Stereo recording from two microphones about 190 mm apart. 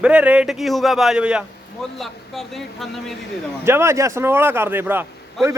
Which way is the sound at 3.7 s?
15° right (ahead or behind).